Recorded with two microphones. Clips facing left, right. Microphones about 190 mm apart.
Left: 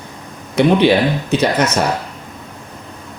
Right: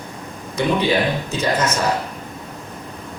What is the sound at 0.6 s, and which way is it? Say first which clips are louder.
Speech: left 7 dB; 70° left (ahead or behind).